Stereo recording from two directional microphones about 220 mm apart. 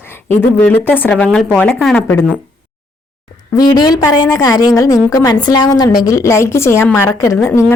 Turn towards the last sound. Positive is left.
turn(degrees=10)  # may be behind; listen again after turning